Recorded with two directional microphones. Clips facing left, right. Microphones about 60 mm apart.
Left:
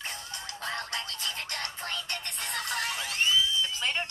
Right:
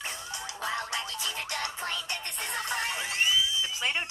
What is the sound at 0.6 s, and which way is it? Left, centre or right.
Music, centre.